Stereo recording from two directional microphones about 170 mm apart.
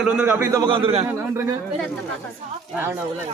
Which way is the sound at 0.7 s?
35° right (ahead or behind).